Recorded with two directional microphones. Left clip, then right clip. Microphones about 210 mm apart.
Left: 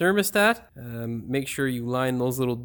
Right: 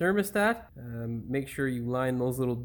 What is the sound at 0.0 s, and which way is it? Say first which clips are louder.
Speech: left 5 dB; 40° left (ahead or behind).